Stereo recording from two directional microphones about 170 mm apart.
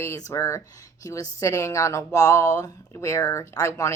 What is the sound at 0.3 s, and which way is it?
Speech, 15° left (ahead or behind).